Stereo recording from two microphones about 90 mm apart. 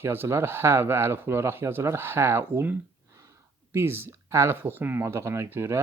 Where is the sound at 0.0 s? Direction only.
25° right (ahead or behind).